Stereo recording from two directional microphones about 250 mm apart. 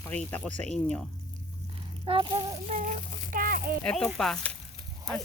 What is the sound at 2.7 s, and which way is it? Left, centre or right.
Speech, right.